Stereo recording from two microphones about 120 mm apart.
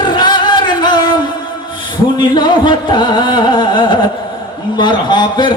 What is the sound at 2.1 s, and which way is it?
Music, 40° left (ahead or behind).